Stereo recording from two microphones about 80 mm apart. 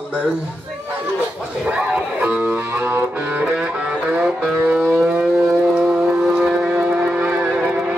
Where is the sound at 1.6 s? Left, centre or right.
Centre.